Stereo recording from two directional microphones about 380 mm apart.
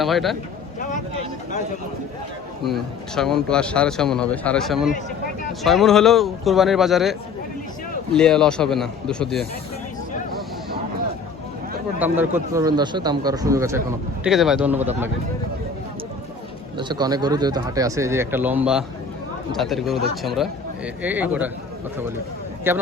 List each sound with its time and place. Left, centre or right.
0.0 s speech: centre
0.8 s vehicle: centre
2.6 s speech: centre
11.9 s speech: centre
16.7 s speech: centre
22.7 s speech: centre